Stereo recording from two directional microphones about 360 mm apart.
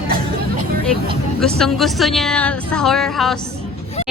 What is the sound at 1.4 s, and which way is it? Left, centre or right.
A woman's voice, centre.